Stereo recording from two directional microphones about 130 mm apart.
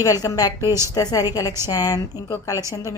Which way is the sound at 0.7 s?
20° right (ahead or behind).